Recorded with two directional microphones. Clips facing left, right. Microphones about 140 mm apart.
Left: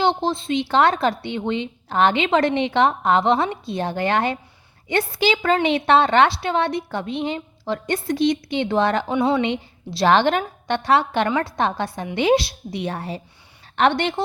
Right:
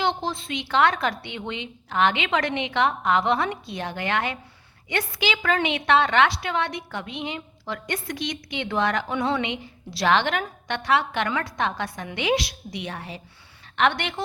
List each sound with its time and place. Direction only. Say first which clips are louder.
0.0 s a woman's voice: left 5 dB; 25° left (ahead or behind)